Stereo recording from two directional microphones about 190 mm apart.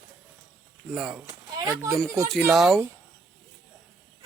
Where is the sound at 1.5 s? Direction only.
15° right (ahead or behind).